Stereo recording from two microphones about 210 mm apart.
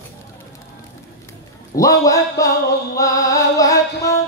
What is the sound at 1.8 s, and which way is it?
Speech, 15° left (ahead or behind).